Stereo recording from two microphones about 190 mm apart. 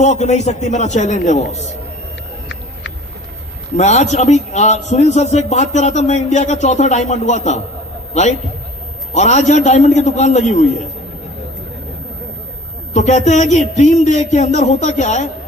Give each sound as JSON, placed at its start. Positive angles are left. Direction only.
{"t": 0.0, "sound": "a man's voice", "side_deg": 40}
{"t": 3.8, "sound": "a man's voice", "side_deg": 35}
{"t": 12.9, "sound": "a man's voice", "side_deg": 40}